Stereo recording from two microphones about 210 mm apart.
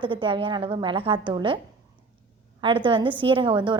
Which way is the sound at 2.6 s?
25° right (ahead or behind).